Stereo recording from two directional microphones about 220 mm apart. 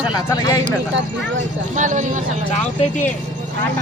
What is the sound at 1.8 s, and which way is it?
Speech, 35° right (ahead or behind).